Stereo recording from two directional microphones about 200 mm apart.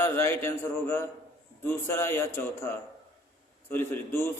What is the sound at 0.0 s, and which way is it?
A man's voice, 10° left (ahead or behind).